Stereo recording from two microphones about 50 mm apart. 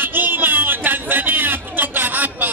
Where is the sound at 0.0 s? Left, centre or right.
Right.